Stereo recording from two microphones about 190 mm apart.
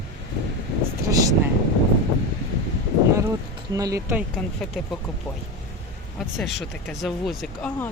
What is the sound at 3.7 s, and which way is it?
Speech, 15° right (ahead or behind).